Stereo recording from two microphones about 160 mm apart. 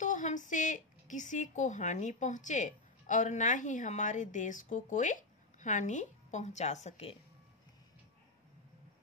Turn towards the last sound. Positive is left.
turn(degrees=45)  # may be behind; listen again after turning